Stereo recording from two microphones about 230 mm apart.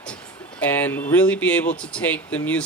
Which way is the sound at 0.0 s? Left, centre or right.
Centre.